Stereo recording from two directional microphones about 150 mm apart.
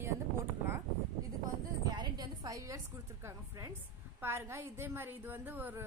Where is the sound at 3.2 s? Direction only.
20° right (ahead or behind).